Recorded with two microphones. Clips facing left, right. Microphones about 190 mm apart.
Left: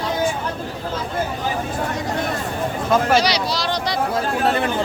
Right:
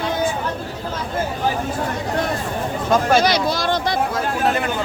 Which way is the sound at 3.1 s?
50° right (ahead or behind).